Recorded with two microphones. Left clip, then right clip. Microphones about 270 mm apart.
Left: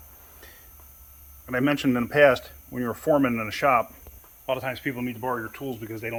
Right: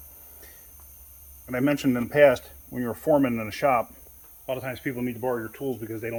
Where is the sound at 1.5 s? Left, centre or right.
Centre.